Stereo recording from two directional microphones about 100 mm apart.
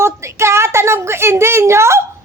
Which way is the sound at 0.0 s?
30° right (ahead or behind).